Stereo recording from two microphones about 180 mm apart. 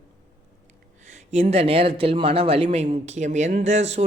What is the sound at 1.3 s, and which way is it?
Speech, 35° right (ahead or behind).